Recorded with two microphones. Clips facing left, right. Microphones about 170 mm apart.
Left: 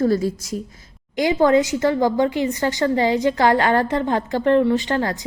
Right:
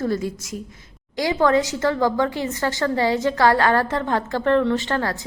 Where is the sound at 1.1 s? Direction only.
20° left (ahead or behind).